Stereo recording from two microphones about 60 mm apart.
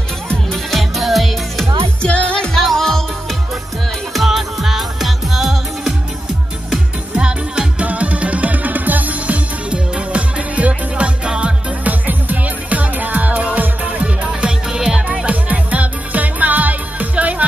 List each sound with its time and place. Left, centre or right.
0.5 s music: centre
2.0 s music: centre
4.1 s music: centre
7.2 s music: centre
15.2 s music: right